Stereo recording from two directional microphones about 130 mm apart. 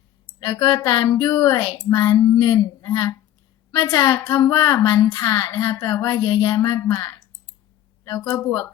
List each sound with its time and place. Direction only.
0.3 s a woman's voice: 35° left (ahead or behind)